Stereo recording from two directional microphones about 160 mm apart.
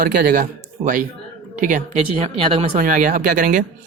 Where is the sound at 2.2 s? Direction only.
35° right (ahead or behind).